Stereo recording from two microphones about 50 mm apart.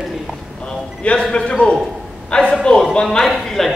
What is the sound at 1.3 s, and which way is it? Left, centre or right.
A man's voice, left.